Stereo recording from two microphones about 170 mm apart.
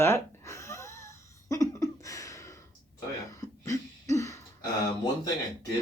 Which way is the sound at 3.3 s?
20° left (ahead or behind).